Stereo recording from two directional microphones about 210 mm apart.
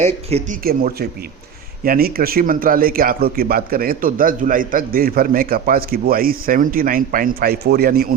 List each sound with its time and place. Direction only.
0.0 s speech: 30° right (ahead or behind)
0.6 s speech: 45° right (ahead or behind)